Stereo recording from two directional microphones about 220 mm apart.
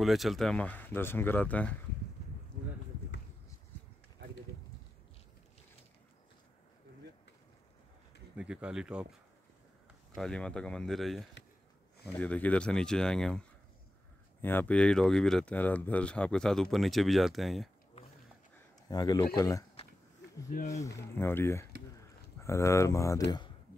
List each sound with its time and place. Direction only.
0.0 s speech: centre (ahead or behind)
8.4 s speech: 5° right (ahead or behind)
10.1 s speech: 5° left (ahead or behind)
18.9 s speech: 15° left (ahead or behind)
21.2 s speech: 10° left (ahead or behind)